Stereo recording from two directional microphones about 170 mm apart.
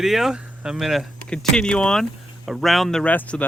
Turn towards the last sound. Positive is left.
turn(degrees=10)  # may be behind; listen again after turning